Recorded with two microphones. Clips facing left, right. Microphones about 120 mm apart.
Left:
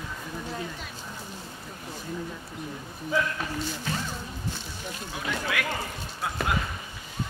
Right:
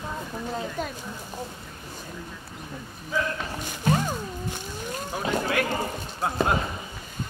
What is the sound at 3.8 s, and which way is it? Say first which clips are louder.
Speech: right 8 dB; 50° right (ahead or behind).